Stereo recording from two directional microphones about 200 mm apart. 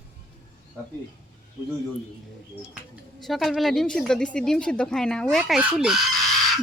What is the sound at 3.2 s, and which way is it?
A woman's voice, centre (ahead or behind).